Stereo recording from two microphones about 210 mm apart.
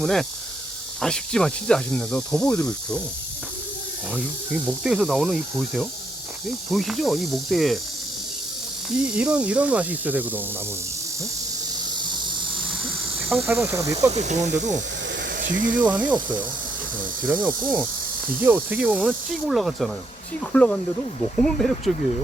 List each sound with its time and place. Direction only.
0.0 s speech: centre (ahead or behind)
4.1 s speech: 5° right (ahead or behind)
9.1 s snake: 5° right (ahead or behind)
13.2 s speech: centre (ahead or behind)
13.5 s snake: 15° right (ahead or behind)
14.1 s speech: 35° right (ahead or behind)
15.1 s a sound: 55° right (ahead or behind)
15.4 s a sound: 40° right (ahead or behind)
15.7 s snake: 5° right (ahead or behind)
18.4 s speech: 10° right (ahead or behind)